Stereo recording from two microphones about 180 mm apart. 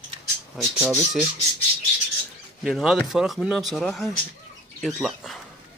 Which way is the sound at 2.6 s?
Centre (ahead or behind).